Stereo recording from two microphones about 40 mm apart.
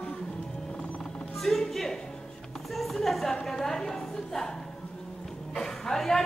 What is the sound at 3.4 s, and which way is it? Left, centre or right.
A woman's voice, centre.